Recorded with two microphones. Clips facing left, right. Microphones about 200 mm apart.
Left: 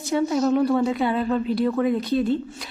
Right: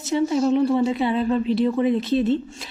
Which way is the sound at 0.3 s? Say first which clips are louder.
Right 1 dB; 25° right (ahead or behind).